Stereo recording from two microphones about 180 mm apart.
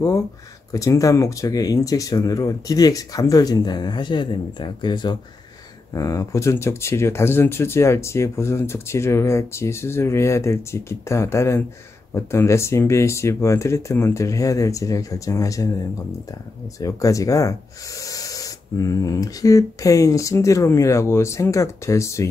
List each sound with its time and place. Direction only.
0.7 s speech: 20° left (ahead or behind)
16.8 s speech: 20° left (ahead or behind)